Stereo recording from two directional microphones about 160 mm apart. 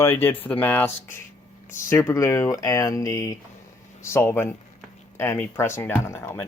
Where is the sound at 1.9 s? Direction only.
15° left (ahead or behind).